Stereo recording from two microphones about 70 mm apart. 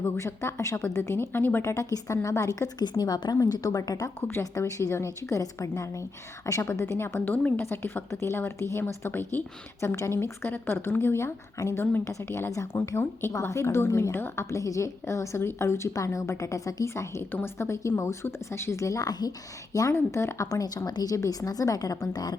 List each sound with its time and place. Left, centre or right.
0.0 s speech: left
1.7 s a woman's voice: left
3.0 s a woman's voice: left
3.4 s a woman's voice: left
4.5 s a woman's voice: left
7.3 s a woman's voice: left
7.6 s a woman's voice: left
16.9 s a woman's voice: left